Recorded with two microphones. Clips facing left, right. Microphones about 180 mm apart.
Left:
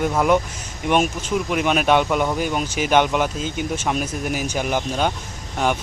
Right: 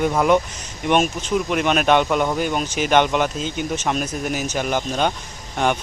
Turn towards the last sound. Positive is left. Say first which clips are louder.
# even
turn(degrees=10)  # may be behind; listen again after turning